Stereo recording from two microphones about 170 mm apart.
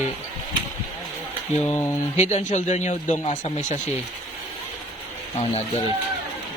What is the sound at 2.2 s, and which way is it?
Speech, 45° left (ahead or behind).